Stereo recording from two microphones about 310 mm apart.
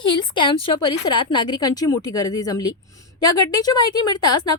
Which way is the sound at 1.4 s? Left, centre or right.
Centre.